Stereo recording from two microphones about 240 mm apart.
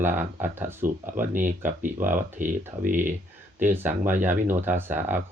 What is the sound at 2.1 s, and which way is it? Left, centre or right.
Speech, right.